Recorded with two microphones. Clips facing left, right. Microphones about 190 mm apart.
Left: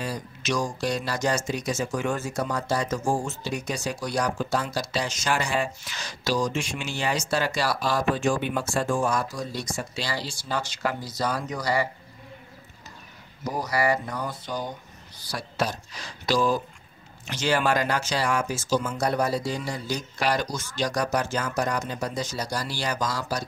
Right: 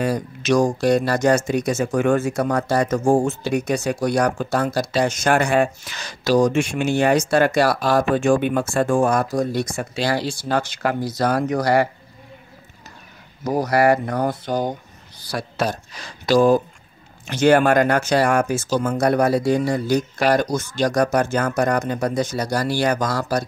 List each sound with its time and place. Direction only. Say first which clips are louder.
0.0 s speech: right 9 dB; 55° right (ahead or behind)
13.4 s speech: right 8 dB; 60° right (ahead or behind)